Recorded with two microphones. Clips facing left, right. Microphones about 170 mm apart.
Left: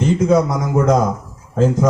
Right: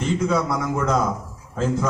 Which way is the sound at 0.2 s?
40° left (ahead or behind).